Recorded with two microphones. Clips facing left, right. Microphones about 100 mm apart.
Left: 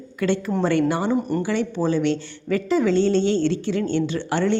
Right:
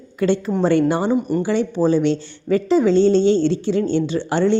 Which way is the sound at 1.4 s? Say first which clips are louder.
Right 4 dB; 20° right (ahead or behind).